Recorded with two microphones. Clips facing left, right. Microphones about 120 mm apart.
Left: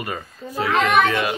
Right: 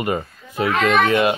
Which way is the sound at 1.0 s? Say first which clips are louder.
Right 4 dB; 25° right (ahead or behind).